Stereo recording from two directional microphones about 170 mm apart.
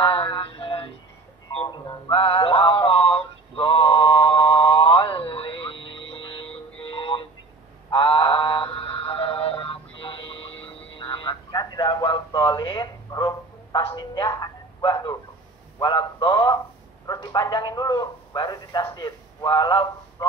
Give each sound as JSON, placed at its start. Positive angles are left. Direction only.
{"t": 0.0, "sound": "mantra", "side_deg": 30}
{"t": 1.9, "sound": "music", "side_deg": 30}
{"t": 6.8, "sound": "synthetic singing", "side_deg": 30}
{"t": 13.9, "sound": "a sound", "side_deg": 25}